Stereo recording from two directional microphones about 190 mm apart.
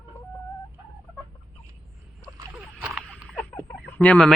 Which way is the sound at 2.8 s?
5° right (ahead or behind).